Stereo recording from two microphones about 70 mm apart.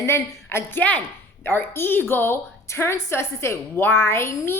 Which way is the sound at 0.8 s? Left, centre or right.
Left.